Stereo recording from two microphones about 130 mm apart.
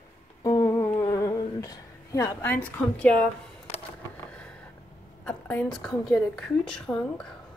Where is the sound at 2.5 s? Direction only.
10° left (ahead or behind).